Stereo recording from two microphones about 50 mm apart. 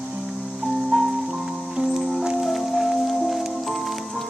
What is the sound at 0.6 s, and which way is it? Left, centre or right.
Music, centre.